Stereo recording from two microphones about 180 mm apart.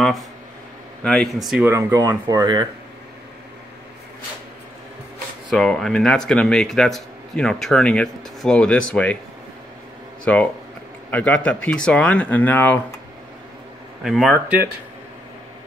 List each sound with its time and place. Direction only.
1.0 s speech: centre (ahead or behind)
1.7 s speech: 15° right (ahead or behind)
5.5 s speech: centre (ahead or behind)
10.2 s speech: 5° left (ahead or behind)
14.0 s speech: centre (ahead or behind)